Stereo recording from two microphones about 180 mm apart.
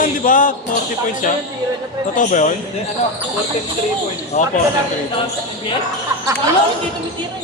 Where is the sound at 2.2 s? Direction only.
45° left (ahead or behind).